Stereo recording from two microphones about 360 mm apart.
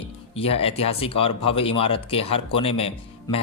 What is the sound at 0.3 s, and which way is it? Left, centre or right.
Speech, centre.